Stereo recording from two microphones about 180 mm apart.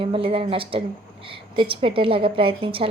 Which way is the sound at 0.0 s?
30° right (ahead or behind).